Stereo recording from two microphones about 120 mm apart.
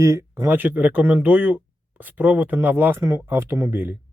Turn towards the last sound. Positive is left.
turn(degrees=-20)  # may be behind; listen again after turning